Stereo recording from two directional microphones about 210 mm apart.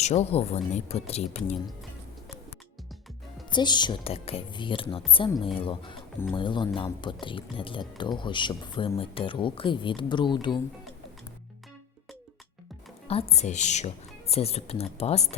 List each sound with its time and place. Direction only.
0.0 s speech: 30° left (ahead or behind)
3.5 s speech: 20° left (ahead or behind)
13.1 s speech: 30° left (ahead or behind)